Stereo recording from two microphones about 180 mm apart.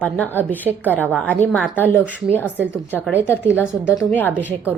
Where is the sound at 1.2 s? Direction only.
5° left (ahead or behind).